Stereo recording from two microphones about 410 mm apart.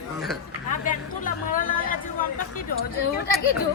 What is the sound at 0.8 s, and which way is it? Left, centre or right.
Chatter, centre.